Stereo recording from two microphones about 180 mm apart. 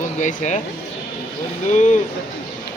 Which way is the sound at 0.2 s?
45° left (ahead or behind).